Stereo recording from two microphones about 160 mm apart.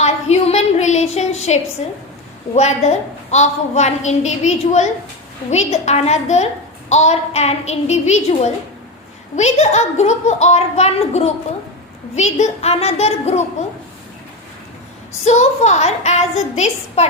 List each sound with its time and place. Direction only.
0.0 s a sound: 45° left (ahead or behind)
2.6 s a woman's voice: 45° left (ahead or behind)
15.2 s a woman's voice: 45° left (ahead or behind)